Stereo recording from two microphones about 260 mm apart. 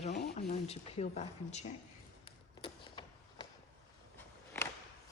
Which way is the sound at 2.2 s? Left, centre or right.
Centre.